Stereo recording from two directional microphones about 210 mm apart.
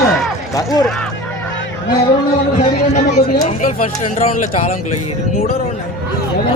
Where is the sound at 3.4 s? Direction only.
35° left (ahead or behind).